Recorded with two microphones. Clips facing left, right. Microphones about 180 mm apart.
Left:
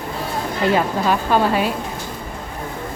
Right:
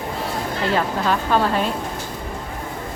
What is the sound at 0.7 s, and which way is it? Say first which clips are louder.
Speech: left 2 dB; 10° left (ahead or behind).